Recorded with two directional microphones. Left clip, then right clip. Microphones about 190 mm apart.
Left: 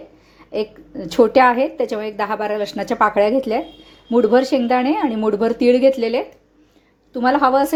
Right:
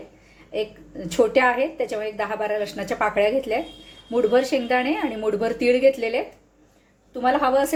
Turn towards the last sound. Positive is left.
turn(degrees=35)  # may be behind; listen again after turning